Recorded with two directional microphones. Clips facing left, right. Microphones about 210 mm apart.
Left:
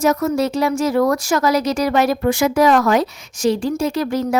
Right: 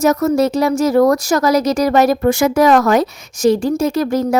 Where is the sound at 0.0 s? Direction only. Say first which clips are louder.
Right 4 dB; 40° right (ahead or behind).